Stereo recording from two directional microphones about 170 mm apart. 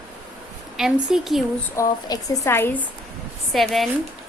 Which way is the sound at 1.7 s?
20° left (ahead or behind).